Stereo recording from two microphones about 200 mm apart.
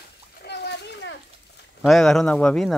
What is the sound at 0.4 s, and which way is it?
Splash, 55° left (ahead or behind).